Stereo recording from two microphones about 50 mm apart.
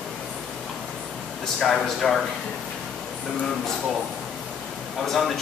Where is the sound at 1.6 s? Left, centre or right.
Centre.